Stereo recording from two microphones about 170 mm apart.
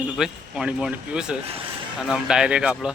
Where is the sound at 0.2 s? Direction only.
5° right (ahead or behind).